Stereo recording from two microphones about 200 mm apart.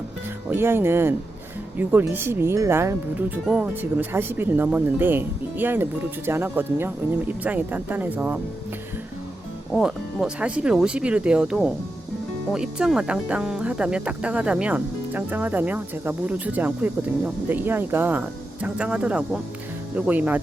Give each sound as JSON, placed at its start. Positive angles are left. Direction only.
{"t": 0.5, "sound": "speech", "side_deg": -10}
{"t": 9.7, "sound": "speech", "side_deg": 0}